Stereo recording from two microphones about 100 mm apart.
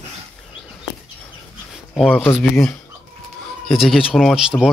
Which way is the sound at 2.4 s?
5° left (ahead or behind).